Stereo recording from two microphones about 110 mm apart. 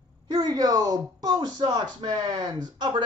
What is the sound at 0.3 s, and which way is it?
Speech, 35° right (ahead or behind).